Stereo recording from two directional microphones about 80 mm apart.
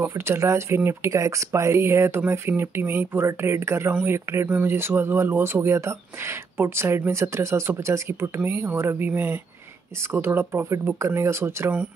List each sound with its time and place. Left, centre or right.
0.0 s speech: right